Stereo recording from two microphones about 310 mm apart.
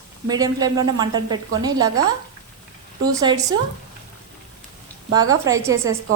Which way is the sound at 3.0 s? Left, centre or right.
Centre.